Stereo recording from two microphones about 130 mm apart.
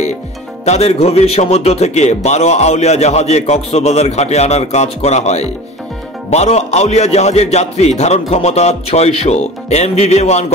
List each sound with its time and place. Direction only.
0.7 s a man's voice: 55° left (ahead or behind)